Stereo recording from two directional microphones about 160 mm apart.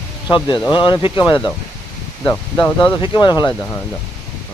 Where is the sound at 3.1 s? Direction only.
25° left (ahead or behind).